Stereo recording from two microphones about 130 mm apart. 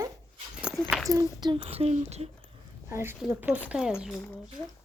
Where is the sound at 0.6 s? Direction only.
5° right (ahead or behind).